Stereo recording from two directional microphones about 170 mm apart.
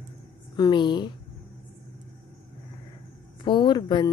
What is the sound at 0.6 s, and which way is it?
Speech, 25° left (ahead or behind).